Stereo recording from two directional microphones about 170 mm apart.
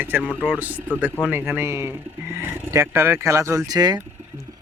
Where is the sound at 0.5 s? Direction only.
10° right (ahead or behind).